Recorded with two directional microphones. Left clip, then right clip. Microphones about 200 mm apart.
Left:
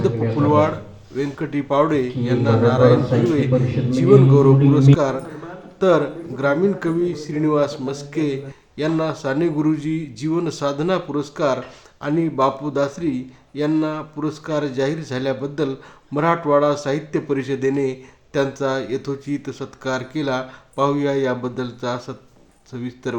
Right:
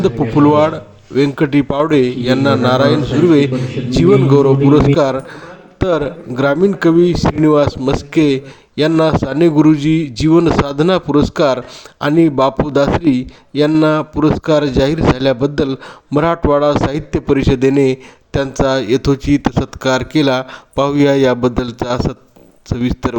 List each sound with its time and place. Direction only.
0.0 s a man's voice: 45° right (ahead or behind)